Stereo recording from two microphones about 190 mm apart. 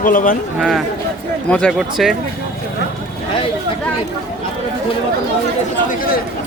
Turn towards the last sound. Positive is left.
turn(degrees=50)  # may be behind; listen again after turning